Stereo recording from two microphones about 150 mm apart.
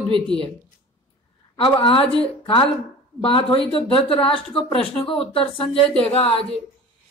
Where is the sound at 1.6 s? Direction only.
35° left (ahead or behind).